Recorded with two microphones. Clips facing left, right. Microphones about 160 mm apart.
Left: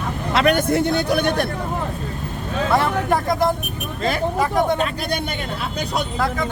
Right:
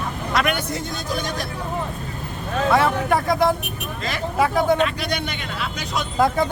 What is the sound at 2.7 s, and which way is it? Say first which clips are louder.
Speech: even; centre (ahead or behind).